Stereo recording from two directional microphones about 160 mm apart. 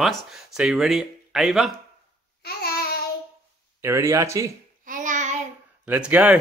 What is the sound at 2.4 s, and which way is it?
Babbling, 75° left (ahead or behind).